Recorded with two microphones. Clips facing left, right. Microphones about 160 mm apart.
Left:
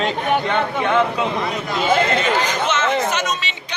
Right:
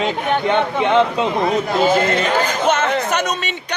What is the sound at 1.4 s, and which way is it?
Speech, 50° right (ahead or behind).